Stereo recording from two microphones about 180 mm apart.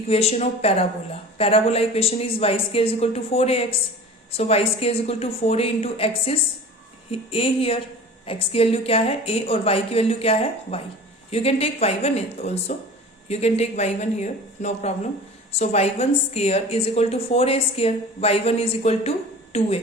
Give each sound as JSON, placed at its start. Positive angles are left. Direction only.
{"t": 0.1, "sound": "a woman's voice", "side_deg": 35}